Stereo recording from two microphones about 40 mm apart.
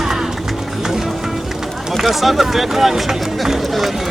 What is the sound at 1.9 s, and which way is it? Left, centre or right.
Speech, centre.